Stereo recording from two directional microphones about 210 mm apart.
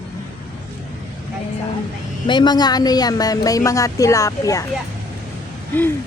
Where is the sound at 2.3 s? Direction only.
20° left (ahead or behind).